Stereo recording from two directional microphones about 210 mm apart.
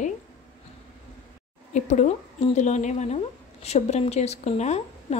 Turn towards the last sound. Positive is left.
turn(degrees=30)  # may be behind; listen again after turning